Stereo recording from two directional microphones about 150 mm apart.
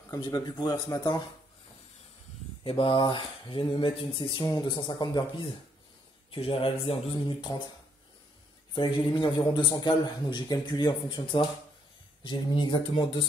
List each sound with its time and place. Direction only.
0.1 s speech: 25° left (ahead or behind)
2.6 s speech: 35° left (ahead or behind)
8.7 s speech: 35° left (ahead or behind)